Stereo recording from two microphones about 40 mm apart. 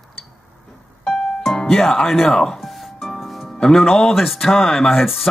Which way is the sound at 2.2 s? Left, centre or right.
Centre.